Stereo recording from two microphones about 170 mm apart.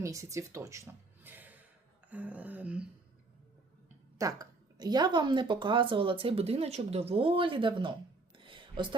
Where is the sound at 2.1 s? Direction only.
10° right (ahead or behind).